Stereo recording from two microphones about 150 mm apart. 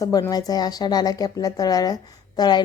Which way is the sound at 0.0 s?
25° left (ahead or behind).